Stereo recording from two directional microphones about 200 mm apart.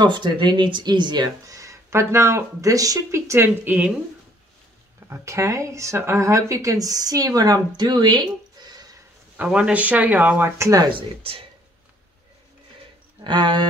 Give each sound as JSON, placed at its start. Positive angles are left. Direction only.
{"t": 0.0, "sound": "speech", "side_deg": -20}
{"t": 5.0, "sound": "speech", "side_deg": -15}
{"t": 9.4, "sound": "speech", "side_deg": -5}
{"t": 13.2, "sound": "speech", "side_deg": -25}